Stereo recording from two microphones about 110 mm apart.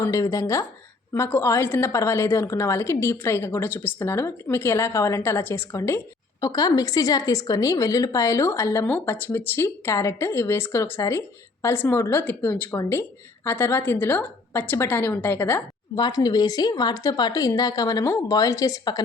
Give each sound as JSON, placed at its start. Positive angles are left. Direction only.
{"t": 0.0, "sound": "a woman's voice", "side_deg": 30}
{"t": 6.4, "sound": "a woman's voice", "side_deg": 35}
{"t": 16.0, "sound": "a woman's voice", "side_deg": 40}